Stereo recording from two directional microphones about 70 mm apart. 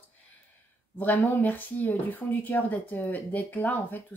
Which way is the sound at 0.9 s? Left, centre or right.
Left.